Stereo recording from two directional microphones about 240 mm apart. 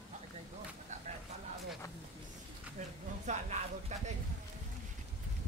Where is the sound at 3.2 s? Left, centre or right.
Right.